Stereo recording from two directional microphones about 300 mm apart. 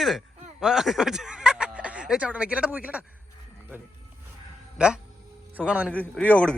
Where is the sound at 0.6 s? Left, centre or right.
Centre.